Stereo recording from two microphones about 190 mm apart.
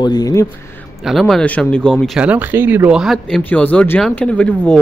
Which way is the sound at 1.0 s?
Centre (ahead or behind).